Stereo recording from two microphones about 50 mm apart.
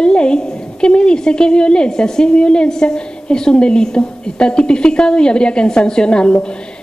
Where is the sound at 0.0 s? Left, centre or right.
Centre.